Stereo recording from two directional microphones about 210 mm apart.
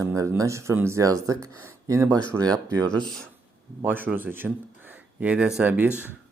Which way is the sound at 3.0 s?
5° left (ahead or behind).